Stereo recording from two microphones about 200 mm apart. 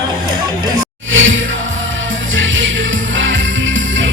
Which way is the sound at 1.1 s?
75° right (ahead or behind).